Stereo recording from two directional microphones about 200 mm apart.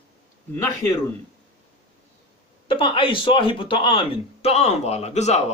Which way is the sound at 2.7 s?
25° left (ahead or behind).